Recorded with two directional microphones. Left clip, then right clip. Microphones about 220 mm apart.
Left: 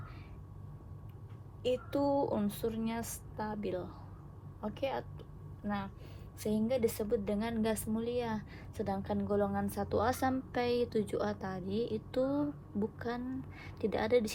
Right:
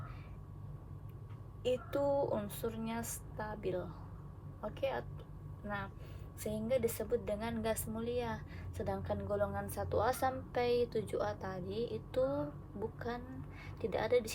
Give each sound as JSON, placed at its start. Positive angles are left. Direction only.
{"t": 1.6, "sound": "a woman's voice", "side_deg": 35}
{"t": 12.2, "sound": "speech", "side_deg": 75}
{"t": 13.0, "sound": "a woman's voice", "side_deg": 40}